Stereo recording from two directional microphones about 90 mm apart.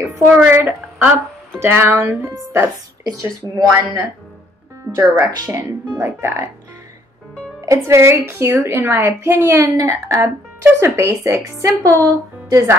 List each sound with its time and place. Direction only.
0.4 s a woman's voice: 25° right (ahead or behind)
7.6 s a woman's voice: 30° right (ahead or behind)
9.8 s speech: 35° right (ahead or behind)